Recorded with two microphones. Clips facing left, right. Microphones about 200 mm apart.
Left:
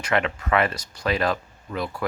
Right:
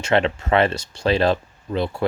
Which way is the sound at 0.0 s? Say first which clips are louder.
Right 5 dB; 30° right (ahead or behind).